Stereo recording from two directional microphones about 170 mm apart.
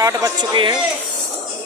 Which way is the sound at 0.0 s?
20° right (ahead or behind).